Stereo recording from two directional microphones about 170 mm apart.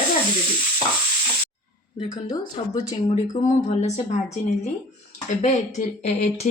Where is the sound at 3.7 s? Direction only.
40° left (ahead or behind).